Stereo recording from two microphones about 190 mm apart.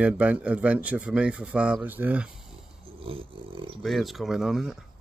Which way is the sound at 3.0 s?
30° right (ahead or behind).